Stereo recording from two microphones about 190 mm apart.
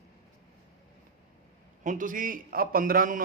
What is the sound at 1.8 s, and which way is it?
A man's voice, 40° right (ahead or behind).